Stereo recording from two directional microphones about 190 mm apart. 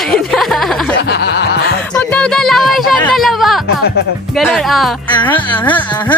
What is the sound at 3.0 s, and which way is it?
Speech, centre (ahead or behind).